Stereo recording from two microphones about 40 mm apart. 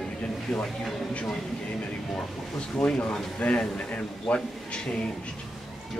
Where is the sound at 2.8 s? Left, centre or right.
Left.